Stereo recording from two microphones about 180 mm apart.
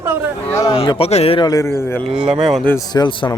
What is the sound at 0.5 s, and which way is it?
Speech, 20° left (ahead or behind).